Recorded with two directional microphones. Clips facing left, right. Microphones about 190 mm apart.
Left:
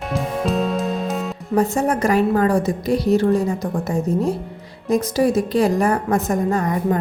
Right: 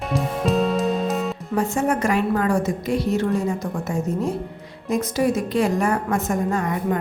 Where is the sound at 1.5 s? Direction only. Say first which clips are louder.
Left 3 dB; 35° left (ahead or behind).